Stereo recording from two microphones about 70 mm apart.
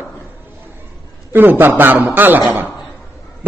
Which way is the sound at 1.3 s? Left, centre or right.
Right.